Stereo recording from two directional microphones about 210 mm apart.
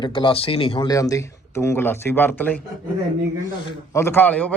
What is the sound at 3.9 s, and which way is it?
Speech, 10° left (ahead or behind).